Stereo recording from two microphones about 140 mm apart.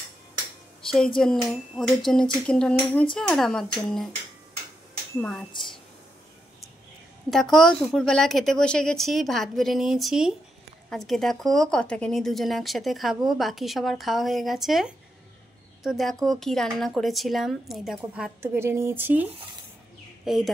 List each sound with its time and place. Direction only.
0.8 s a woman's voice: 5° left (ahead or behind)
5.2 s a woman's voice: centre (ahead or behind)
7.2 s a woman's voice: centre (ahead or behind)
18.4 s speech: 15° right (ahead or behind)
20.2 s a woman's voice: centre (ahead or behind)